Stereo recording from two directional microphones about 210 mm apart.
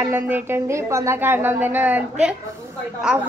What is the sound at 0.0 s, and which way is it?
Speech, 10° right (ahead or behind).